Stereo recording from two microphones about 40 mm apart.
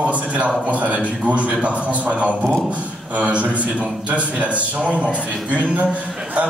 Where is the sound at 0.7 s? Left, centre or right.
Right.